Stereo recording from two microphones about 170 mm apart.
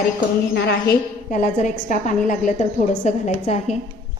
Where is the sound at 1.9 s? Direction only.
50° left (ahead or behind).